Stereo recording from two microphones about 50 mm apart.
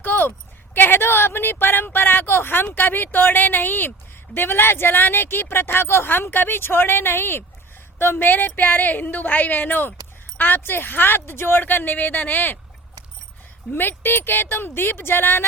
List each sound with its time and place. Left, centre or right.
0.0 s a sound: left
1.0 s a woman's voice: left
13.7 s speech: left